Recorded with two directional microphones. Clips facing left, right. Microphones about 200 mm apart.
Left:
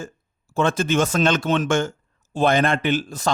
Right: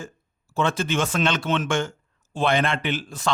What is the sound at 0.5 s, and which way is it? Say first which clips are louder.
Speech: left 4 dB; 45° left (ahead or behind).